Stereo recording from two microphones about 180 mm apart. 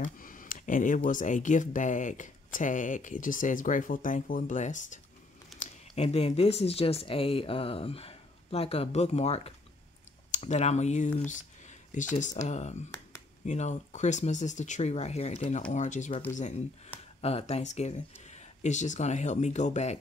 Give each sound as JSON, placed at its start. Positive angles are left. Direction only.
{"t": 0.0, "sound": "speech", "side_deg": 50}
{"t": 11.2, "sound": "a sound", "side_deg": 45}
{"t": 12.4, "sound": "speech", "side_deg": 40}